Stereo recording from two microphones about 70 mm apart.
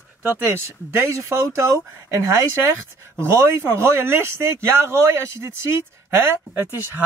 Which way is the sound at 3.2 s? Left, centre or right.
Right.